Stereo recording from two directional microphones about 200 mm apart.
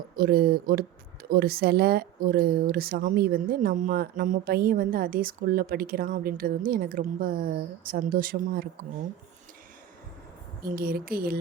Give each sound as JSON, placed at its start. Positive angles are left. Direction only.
{"t": 0.2, "sound": "speech", "side_deg": -50}
{"t": 10.6, "sound": "speech", "side_deg": -45}